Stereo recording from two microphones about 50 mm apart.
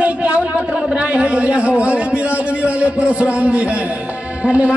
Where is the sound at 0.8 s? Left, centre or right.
Centre.